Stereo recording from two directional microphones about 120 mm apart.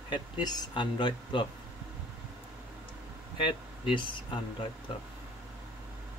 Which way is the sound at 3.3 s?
45° left (ahead or behind).